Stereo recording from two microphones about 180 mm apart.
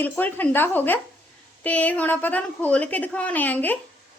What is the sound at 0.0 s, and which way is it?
A woman's voice, 10° left (ahead or behind).